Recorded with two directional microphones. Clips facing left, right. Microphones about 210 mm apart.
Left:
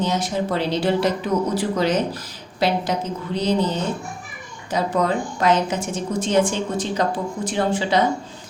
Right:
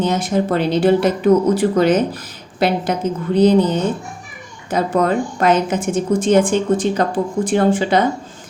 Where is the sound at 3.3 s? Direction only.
55° right (ahead or behind).